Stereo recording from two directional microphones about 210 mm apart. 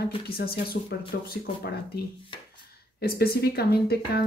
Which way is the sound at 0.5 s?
45° left (ahead or behind).